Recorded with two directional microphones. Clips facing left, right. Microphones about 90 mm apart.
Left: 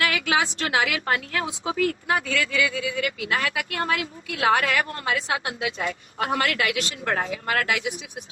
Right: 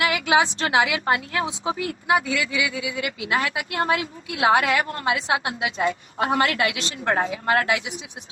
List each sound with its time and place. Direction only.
0.0 s a woman's voice: 20° right (ahead or behind)